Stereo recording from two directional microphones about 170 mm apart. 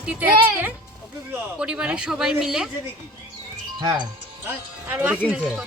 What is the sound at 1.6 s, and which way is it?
Speech, 5° right (ahead or behind).